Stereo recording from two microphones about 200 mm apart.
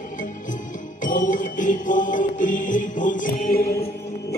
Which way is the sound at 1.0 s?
40° left (ahead or behind).